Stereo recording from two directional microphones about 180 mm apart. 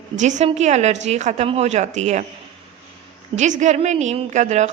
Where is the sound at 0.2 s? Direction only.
40° right (ahead or behind).